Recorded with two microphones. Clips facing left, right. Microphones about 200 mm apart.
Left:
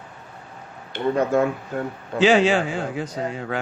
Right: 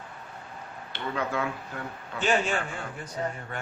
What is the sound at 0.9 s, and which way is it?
Speech, 45° left (ahead or behind).